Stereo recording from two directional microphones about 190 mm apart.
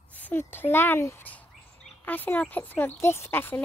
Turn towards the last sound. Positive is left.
turn(degrees=10)  # may be behind; listen again after turning